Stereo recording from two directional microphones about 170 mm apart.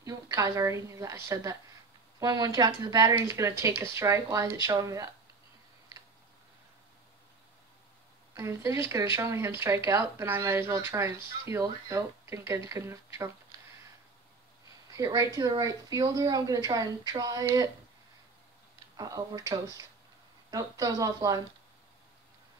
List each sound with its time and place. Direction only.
0.0 s a woman's voice: 20° right (ahead or behind)
8.4 s speech: 15° right (ahead or behind)
15.0 s speech: 20° right (ahead or behind)
18.9 s speech: 20° right (ahead or behind)